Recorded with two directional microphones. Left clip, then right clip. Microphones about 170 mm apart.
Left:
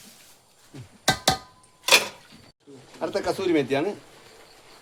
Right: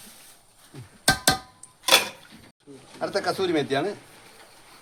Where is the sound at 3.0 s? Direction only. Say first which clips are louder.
Even; 15° left (ahead or behind).